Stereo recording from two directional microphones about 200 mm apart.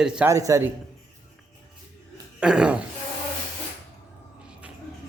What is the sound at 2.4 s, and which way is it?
Speech, 5° right (ahead or behind).